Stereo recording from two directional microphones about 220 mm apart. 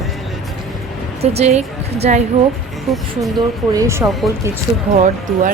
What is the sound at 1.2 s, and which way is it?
A woman's voice, 30° right (ahead or behind).